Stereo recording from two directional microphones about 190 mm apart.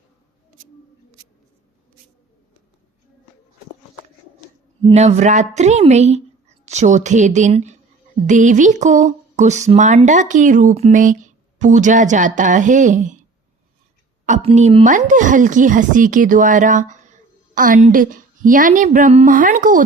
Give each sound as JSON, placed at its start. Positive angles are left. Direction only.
{"t": 4.8, "sound": "speech", "side_deg": -30}
{"t": 14.3, "sound": "speech", "side_deg": -40}
{"t": 14.8, "sound": "speech", "side_deg": -40}